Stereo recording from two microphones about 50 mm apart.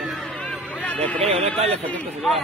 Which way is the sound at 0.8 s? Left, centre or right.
Left.